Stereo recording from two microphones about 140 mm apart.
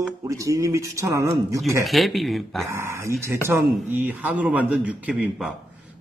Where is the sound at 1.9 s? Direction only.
Centre (ahead or behind).